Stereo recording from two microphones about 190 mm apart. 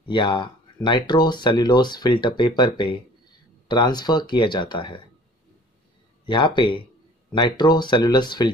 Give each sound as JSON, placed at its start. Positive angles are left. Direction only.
{"t": 0.0, "sound": "speech", "side_deg": 25}
{"t": 6.2, "sound": "speech", "side_deg": 25}